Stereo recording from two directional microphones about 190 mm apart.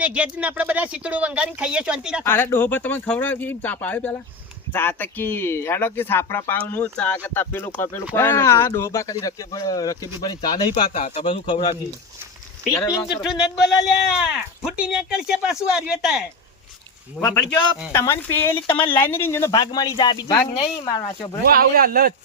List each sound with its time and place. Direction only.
0.0 s speech: 5° right (ahead or behind)
2.2 s speech: 10° left (ahead or behind)
10.9 s speech: 40° left (ahead or behind)
11.2 s speech: 25° left (ahead or behind)
13.1 s speech: centre (ahead or behind)
17.9 s speech: 15° left (ahead or behind)
20.6 s speech: 30° left (ahead or behind)
21.4 s speech: 50° right (ahead or behind)